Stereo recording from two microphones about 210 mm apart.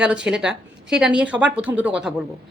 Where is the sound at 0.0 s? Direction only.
5° right (ahead or behind).